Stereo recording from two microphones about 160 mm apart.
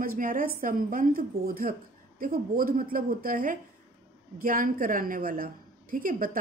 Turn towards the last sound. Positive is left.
turn(degrees=-60)  # may be behind; listen again after turning